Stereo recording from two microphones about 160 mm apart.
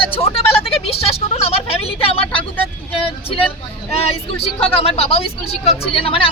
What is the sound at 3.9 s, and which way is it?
Speech, 40° left (ahead or behind).